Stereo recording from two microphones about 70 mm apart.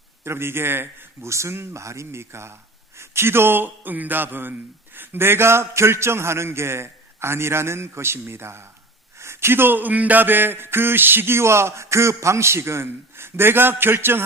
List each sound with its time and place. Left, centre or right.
0.3 s speech: right